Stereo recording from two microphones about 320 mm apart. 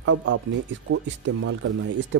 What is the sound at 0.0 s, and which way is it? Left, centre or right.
Speech, right.